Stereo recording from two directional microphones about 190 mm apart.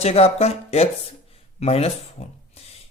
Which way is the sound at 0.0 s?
35° left (ahead or behind).